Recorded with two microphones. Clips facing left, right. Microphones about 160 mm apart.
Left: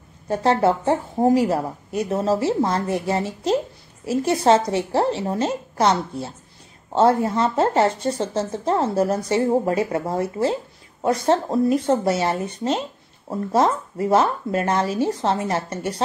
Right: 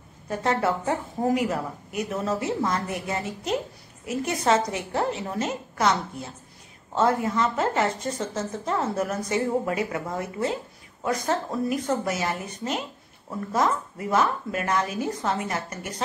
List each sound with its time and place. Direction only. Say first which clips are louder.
0.3 s speech: left 6 dB; 30° left (ahead or behind)